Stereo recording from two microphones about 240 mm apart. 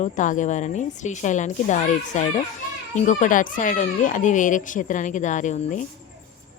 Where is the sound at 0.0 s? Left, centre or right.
Left.